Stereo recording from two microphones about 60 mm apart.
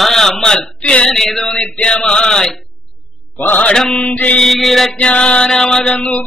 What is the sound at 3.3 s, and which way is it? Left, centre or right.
Speech, left.